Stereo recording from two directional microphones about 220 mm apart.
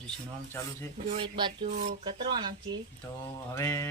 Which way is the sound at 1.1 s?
20° right (ahead or behind).